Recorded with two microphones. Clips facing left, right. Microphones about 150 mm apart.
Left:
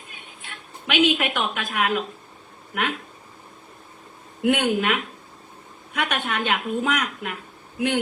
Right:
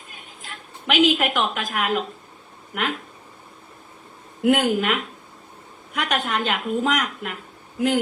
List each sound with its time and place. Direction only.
0.1 s a woman's voice: 40° right (ahead or behind)
4.4 s a woman's voice: 45° right (ahead or behind)